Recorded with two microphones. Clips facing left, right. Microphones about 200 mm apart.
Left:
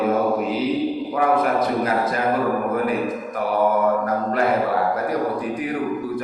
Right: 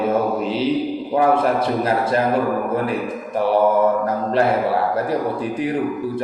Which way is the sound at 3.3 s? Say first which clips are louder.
Right 8 dB; 30° right (ahead or behind).